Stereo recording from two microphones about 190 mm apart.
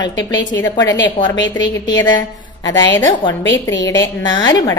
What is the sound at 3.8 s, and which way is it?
Speech, 20° left (ahead or behind).